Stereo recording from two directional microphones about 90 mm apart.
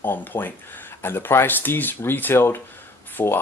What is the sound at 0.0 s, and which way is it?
Speech, 25° left (ahead or behind).